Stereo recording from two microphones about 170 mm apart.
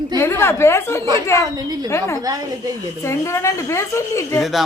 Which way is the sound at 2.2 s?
20° right (ahead or behind).